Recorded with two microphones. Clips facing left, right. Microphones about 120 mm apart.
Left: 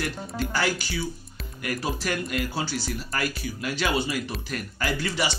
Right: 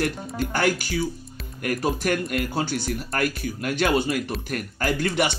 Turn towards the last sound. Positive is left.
turn(degrees=-55)  # may be behind; listen again after turning